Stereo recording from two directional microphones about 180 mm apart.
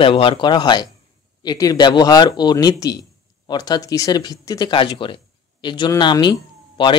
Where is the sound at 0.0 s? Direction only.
30° left (ahead or behind).